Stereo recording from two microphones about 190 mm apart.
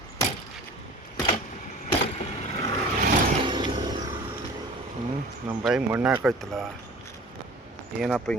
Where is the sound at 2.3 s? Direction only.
40° left (ahead or behind).